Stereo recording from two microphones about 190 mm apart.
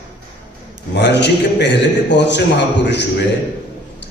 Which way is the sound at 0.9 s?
65° left (ahead or behind).